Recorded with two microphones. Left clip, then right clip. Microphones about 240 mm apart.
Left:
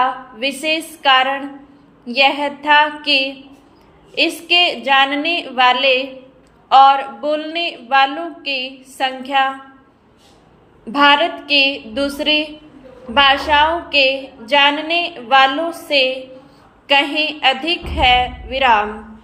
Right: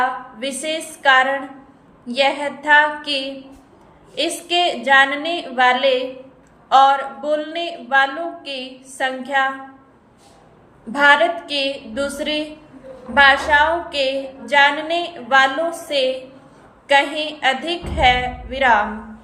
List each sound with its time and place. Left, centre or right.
0.3 s a woman's voice: centre
10.9 s a woman's voice: centre